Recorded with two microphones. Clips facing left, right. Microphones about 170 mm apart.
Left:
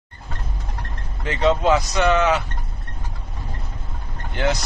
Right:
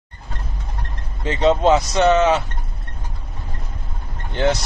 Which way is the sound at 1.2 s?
25° right (ahead or behind).